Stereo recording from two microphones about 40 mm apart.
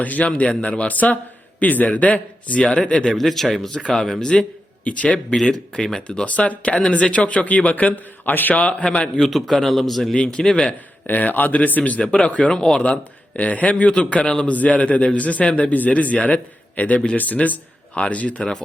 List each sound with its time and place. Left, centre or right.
0.0 s a man's voice: left
2.6 s speech: left
3.2 s a man's voice: centre
4.3 s a sound: left
5.0 s speech: left
6.2 s a man's voice: left
8.5 s a man's voice: left
9.5 s a man's voice: centre
11.0 s speech: left
11.9 s speech: left
12.8 s a man's voice: left
18.3 s a man's voice: centre